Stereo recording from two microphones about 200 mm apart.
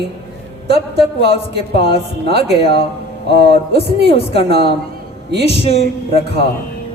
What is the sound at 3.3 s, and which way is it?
Speech, 55° right (ahead or behind).